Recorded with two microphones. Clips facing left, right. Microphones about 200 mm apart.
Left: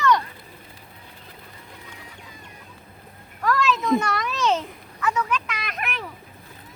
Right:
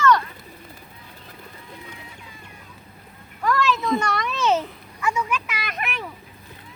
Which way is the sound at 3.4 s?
Centre (ahead or behind).